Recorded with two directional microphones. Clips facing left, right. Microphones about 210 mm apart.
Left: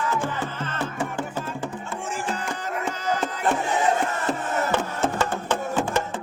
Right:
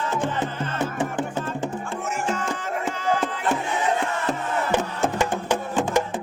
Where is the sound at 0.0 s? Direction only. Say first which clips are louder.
Right 1 dB; 20° right (ahead or behind).